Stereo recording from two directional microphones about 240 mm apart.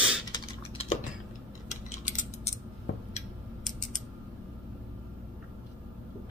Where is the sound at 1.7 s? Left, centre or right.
Left.